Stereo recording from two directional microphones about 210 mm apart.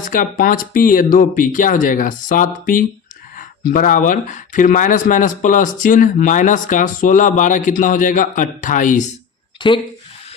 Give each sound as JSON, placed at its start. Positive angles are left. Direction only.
{"t": 0.0, "sound": "speech", "side_deg": 40}
{"t": 9.6, "sound": "speech", "side_deg": 25}